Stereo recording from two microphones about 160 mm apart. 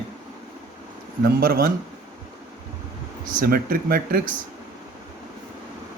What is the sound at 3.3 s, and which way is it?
Speech, 60° right (ahead or behind).